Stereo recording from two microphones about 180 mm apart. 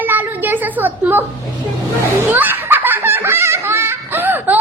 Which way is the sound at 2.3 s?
10° right (ahead or behind).